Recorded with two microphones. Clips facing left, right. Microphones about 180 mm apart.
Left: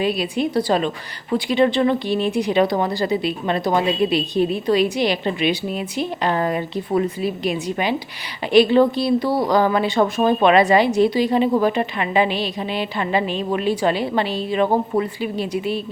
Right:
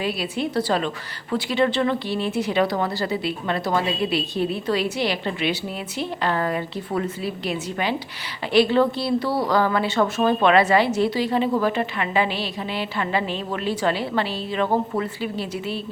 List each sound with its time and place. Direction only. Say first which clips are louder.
0.0 s speech: left 5 dB; 20° left (ahead or behind)